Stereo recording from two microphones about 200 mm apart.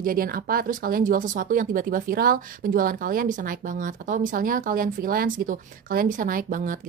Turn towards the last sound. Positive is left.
turn(degrees=-45)  # may be behind; listen again after turning